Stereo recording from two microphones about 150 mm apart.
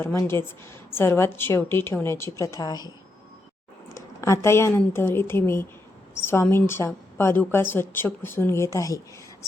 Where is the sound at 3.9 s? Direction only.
20° left (ahead or behind).